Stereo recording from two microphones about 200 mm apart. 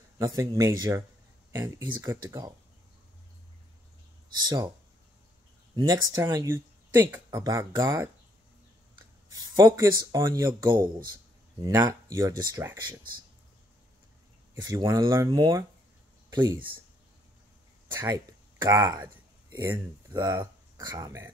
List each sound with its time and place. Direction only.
0.2 s speech: 15° right (ahead or behind)
4.4 s speech: 20° right (ahead or behind)
5.8 s speech: 15° right (ahead or behind)
9.3 s speech: 15° right (ahead or behind)
14.6 s speech: 20° right (ahead or behind)
17.9 s speech: 15° right (ahead or behind)